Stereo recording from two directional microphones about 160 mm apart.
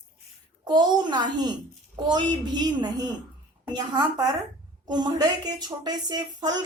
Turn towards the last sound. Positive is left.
turn(degrees=-25)  # may be behind; listen again after turning